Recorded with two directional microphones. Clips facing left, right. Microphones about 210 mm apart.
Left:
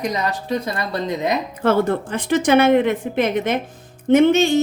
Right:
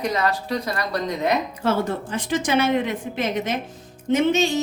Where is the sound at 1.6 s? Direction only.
55° left (ahead or behind).